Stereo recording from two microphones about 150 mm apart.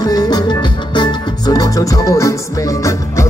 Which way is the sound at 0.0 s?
25° left (ahead or behind).